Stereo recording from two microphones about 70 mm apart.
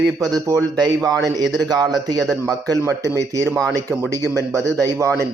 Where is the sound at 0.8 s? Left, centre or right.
Right.